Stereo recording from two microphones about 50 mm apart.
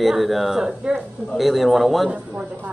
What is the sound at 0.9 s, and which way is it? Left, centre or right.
Speech, right.